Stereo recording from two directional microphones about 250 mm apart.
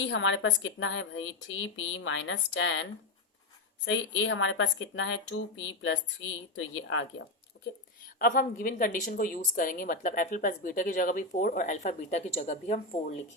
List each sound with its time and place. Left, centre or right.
0.0 s speech: left
3.8 s speech: left
8.2 s a woman's voice: left